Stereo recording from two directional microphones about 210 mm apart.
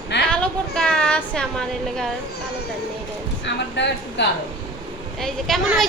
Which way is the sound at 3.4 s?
55° left (ahead or behind).